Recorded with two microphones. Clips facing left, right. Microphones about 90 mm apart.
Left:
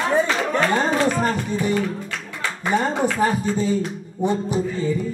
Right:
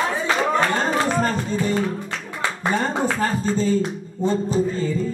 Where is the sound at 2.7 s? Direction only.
15° left (ahead or behind).